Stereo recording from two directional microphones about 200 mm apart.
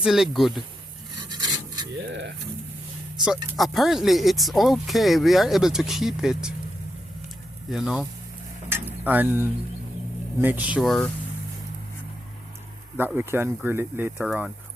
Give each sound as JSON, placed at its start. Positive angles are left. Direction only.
{"t": 0.0, "sound": "speech", "side_deg": 0}
{"t": 1.3, "sound": "filing", "side_deg": -20}
{"t": 2.0, "sound": "pigeon", "side_deg": -60}
{"t": 3.2, "sound": "speech", "side_deg": 0}
{"t": 7.7, "sound": "speech", "side_deg": 0}
{"t": 8.7, "sound": "a sound", "side_deg": -10}
{"t": 10.4, "sound": "speech", "side_deg": -10}
{"t": 13.0, "sound": "speech", "side_deg": -10}